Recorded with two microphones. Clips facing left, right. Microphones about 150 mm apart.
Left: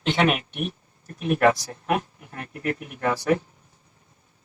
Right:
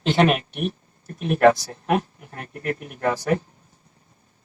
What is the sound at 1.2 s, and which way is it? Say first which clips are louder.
Speech: right 3 dB; 35° right (ahead or behind).